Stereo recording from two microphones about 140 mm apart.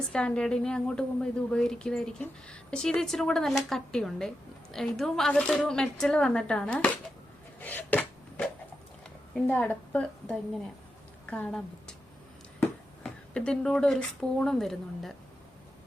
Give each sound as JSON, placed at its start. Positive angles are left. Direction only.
{"t": 0.1, "sound": "a woman's voice", "side_deg": 5}
{"t": 7.6, "sound": "a sound", "side_deg": 15}
{"t": 9.5, "sound": "a woman's voice", "side_deg": 10}
{"t": 13.0, "sound": "a woman's voice", "side_deg": 5}